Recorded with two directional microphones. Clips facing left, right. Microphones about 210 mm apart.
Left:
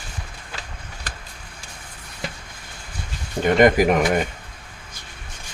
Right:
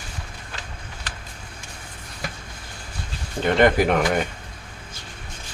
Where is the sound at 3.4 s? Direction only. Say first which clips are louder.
Left 2 dB; 10° left (ahead or behind).